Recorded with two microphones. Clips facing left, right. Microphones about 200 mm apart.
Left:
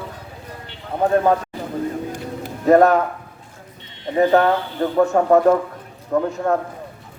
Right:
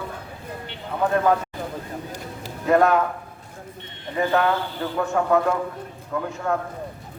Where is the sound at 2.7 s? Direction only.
40° left (ahead or behind).